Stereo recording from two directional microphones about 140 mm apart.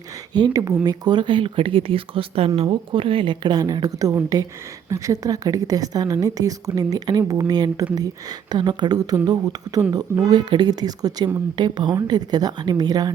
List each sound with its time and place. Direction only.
0.3 s a woman's voice: 25° right (ahead or behind)